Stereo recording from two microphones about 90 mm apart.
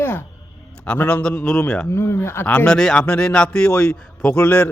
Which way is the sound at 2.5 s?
15° left (ahead or behind).